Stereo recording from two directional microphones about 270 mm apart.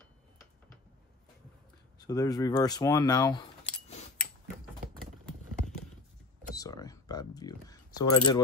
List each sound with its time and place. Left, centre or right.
2.0 s speech: centre
6.5 s a sound: centre
8.0 s speech: centre